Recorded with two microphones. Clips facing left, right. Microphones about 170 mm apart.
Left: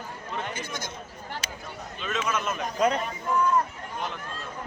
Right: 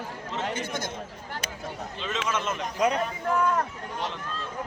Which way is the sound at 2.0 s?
25° right (ahead or behind).